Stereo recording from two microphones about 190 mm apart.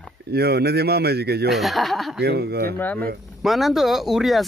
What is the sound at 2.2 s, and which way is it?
Speech, 60° right (ahead or behind).